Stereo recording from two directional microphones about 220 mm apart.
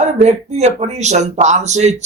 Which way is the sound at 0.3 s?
30° right (ahead or behind).